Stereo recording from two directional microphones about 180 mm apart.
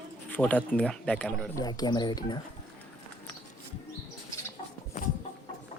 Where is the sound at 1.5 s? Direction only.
20° left (ahead or behind).